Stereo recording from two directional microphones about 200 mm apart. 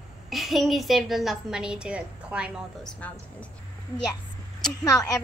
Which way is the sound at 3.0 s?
5° left (ahead or behind).